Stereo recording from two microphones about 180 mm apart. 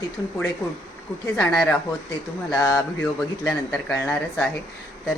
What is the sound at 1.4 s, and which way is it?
Speech, 5° left (ahead or behind).